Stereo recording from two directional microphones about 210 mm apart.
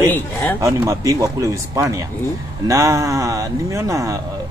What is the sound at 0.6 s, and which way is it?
Speech, 15° right (ahead or behind).